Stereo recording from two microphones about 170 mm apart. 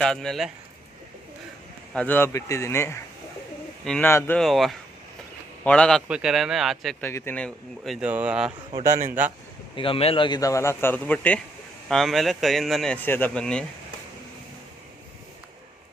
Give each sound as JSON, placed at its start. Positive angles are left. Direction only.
{"t": 0.0, "sound": "speech", "side_deg": 5}
{"t": 1.9, "sound": "a man's voice", "side_deg": 10}
{"t": 3.8, "sound": "speech", "side_deg": 5}
{"t": 6.1, "sound": "speech", "side_deg": -5}
{"t": 7.0, "sound": "speech", "side_deg": 15}
{"t": 9.7, "sound": "a man's voice", "side_deg": 30}